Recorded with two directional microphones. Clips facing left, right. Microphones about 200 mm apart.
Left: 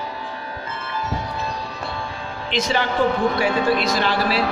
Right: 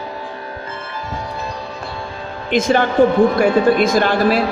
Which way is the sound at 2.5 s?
50° right (ahead or behind).